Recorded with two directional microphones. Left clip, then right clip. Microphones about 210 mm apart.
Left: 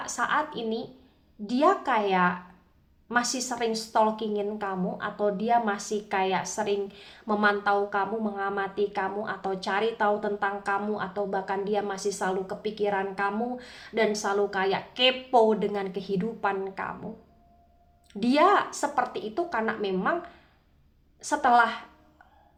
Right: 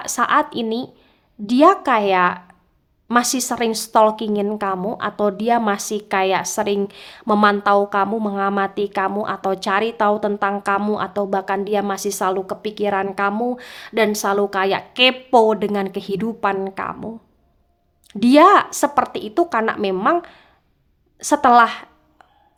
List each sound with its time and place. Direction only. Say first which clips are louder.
0.0 s a woman's voice: right 10 dB; 45° right (ahead or behind)
18.1 s a woman's voice: right 10 dB; 45° right (ahead or behind)